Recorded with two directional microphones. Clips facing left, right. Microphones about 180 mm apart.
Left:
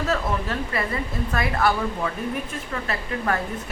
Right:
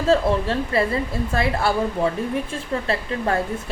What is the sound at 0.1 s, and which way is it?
A woman's voice, 30° right (ahead or behind).